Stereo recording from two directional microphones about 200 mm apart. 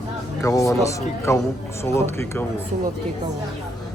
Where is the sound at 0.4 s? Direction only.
15° left (ahead or behind).